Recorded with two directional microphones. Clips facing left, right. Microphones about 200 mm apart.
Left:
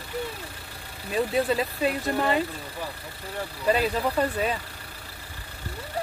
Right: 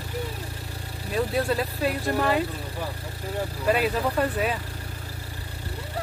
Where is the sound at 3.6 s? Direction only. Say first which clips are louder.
Even; 5° right (ahead or behind).